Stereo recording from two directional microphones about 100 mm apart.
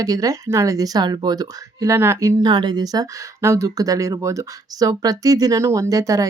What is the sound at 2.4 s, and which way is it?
Speech, 50° right (ahead or behind).